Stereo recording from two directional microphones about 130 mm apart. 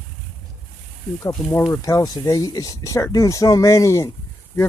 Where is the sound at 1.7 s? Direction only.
25° left (ahead or behind).